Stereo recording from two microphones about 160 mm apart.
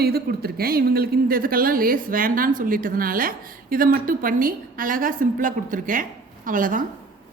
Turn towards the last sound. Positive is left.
turn(degrees=-55)  # may be behind; listen again after turning